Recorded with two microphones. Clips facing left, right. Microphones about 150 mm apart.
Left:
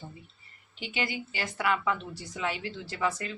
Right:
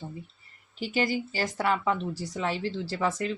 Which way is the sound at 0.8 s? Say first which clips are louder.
Right 6 dB; 40° right (ahead or behind).